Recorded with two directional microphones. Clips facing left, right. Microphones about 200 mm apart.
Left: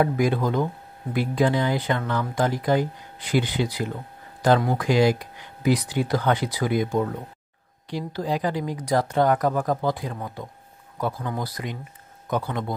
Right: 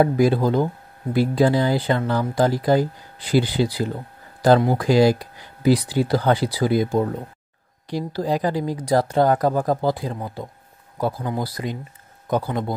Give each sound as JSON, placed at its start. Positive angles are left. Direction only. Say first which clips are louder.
{"t": 0.0, "sound": "speech", "louder": "right 4 dB", "side_deg": -35}